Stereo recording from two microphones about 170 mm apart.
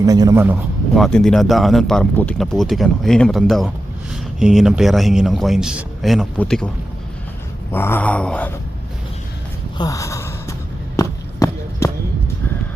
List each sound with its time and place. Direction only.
0.0 s a man's voice: 20° right (ahead or behind)
0.9 s speech: centre (ahead or behind)
7.7 s a sound: 10° left (ahead or behind)
9.7 s gasp: 20° left (ahead or behind)
10.9 s run: 20° left (ahead or behind)